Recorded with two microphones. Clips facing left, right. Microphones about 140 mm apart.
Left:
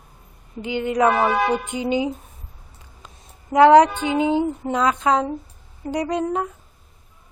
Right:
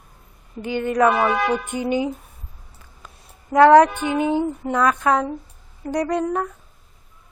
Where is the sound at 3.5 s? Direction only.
15° left (ahead or behind).